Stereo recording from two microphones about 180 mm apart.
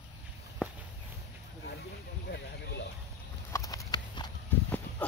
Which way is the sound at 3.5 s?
15° left (ahead or behind).